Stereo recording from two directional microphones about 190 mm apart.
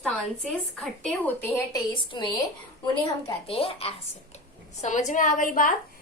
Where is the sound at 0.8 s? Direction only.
5° left (ahead or behind).